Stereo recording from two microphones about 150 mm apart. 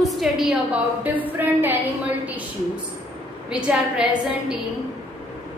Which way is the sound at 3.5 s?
5° right (ahead or behind).